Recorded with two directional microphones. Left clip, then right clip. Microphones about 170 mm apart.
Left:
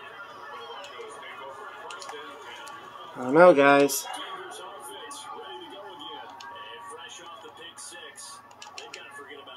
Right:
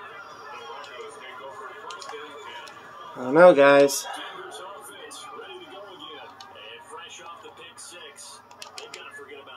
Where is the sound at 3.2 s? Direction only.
Centre (ahead or behind).